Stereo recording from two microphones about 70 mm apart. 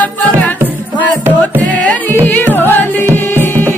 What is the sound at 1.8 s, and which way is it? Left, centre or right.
Music, centre.